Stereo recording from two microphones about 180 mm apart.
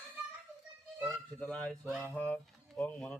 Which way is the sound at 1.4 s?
5° left (ahead or behind).